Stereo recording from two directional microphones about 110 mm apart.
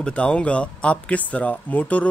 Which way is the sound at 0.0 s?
10° left (ahead or behind).